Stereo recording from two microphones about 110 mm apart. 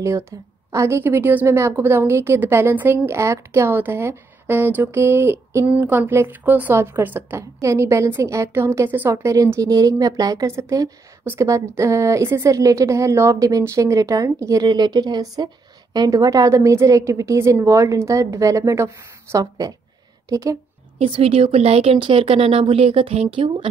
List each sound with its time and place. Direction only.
0.7 s a woman's voice: 25° right (ahead or behind)
21.0 s speech: 65° right (ahead or behind)